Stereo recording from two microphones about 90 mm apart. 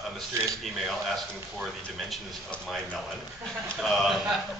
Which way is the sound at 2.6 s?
Centre (ahead or behind).